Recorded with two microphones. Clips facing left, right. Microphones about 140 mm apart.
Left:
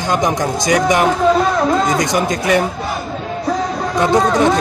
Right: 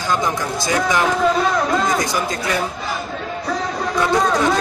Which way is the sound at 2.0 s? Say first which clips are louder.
Left 5 dB; 20° left (ahead or behind).